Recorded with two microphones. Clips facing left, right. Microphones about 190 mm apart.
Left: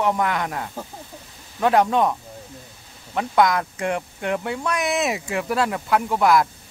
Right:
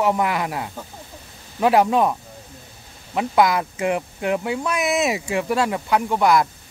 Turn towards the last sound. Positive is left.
turn(degrees=0)  # may be behind; listen again after turning